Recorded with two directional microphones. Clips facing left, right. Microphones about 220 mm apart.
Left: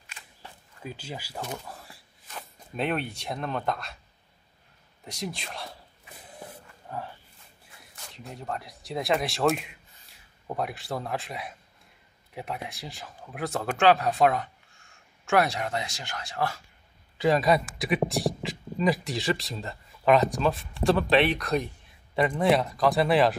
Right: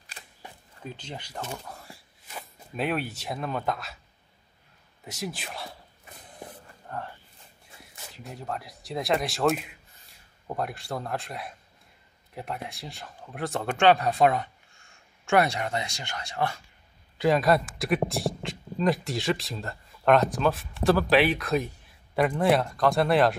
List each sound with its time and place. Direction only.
0.2 s camera: 35° right (ahead or behind)
0.8 s speech: 5° left (ahead or behind)
2.2 s speech: 5° right (ahead or behind)
5.0 s a sound: 5° right (ahead or behind)
6.9 s speech: 5° left (ahead or behind)
8.1 s a man's voice: centre (ahead or behind)